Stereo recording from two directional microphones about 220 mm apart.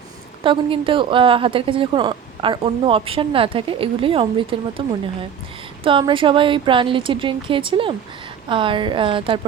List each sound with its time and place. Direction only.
0.4 s a woman's voice: 25° right (ahead or behind)